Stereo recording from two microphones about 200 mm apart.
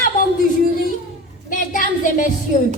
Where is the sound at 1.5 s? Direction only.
40° left (ahead or behind).